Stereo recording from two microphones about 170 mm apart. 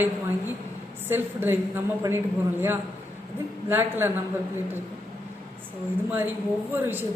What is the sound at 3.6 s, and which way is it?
Speech, 15° right (ahead or behind).